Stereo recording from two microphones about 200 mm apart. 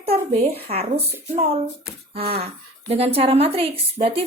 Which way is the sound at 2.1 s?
30° right (ahead or behind).